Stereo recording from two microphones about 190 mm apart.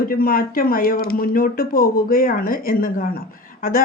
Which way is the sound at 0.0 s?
50° left (ahead or behind).